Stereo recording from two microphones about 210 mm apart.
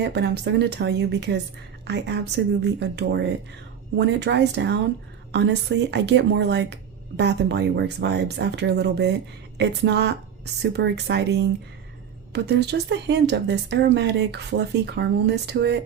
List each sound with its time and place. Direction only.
0.0 s a woman's voice: 55° right (ahead or behind)